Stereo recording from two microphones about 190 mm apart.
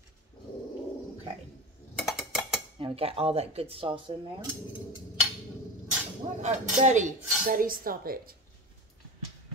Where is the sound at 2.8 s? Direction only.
30° right (ahead or behind).